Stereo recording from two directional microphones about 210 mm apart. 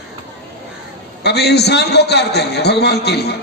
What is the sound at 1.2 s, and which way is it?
A man's voice, 50° left (ahead or behind).